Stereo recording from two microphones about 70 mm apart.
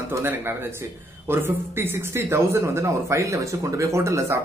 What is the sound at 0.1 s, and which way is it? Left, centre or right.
Speech, right.